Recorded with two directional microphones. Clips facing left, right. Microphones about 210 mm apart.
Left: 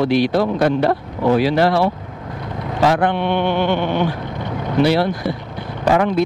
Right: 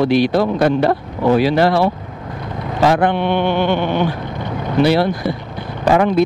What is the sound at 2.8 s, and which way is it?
Speech, 10° right (ahead or behind).